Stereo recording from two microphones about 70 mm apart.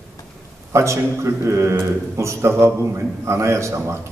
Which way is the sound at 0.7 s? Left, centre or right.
Right.